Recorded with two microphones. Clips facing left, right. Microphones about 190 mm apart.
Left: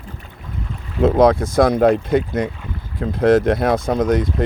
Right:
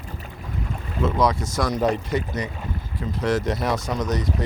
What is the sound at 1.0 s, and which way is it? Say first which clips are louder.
Speech: left 9 dB; 55° left (ahead or behind).